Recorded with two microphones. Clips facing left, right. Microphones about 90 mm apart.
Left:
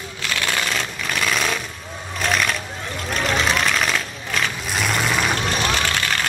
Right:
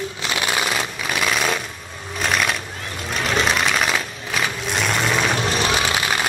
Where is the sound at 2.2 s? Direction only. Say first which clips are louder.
Even; centre (ahead or behind).